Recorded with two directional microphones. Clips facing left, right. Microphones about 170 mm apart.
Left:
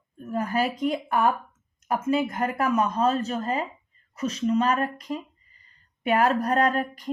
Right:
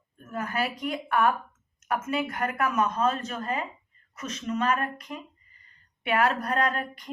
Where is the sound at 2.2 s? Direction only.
30° left (ahead or behind).